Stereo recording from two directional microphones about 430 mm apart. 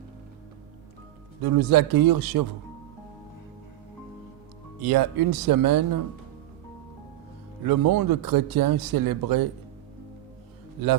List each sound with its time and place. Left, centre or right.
1.4 s speech: right
4.8 s speech: right
7.6 s speech: right